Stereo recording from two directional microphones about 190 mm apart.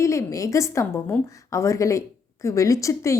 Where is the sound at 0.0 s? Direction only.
15° left (ahead or behind).